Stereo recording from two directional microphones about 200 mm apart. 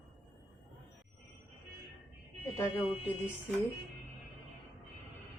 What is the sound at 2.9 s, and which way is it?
Music, 5° right (ahead or behind).